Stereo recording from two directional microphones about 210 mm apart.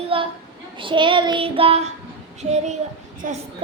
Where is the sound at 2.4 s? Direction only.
30° right (ahead or behind).